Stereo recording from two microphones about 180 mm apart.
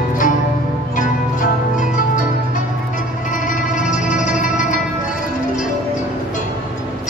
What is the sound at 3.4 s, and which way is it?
Music, 45° left (ahead or behind).